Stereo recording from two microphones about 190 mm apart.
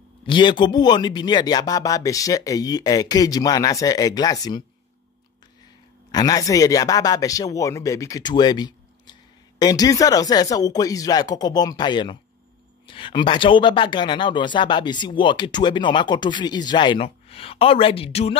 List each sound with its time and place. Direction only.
0.3 s speech: 25° left (ahead or behind)
6.1 s speech: 20° left (ahead or behind)